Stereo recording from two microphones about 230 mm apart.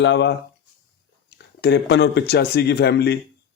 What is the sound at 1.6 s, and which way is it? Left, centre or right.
Speech, left.